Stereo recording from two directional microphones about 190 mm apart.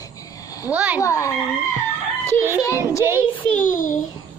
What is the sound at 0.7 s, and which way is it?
Speech, 5° right (ahead or behind).